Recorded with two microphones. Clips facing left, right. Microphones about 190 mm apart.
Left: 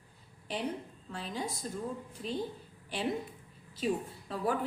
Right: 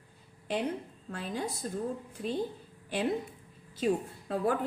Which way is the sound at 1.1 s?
50° right (ahead or behind).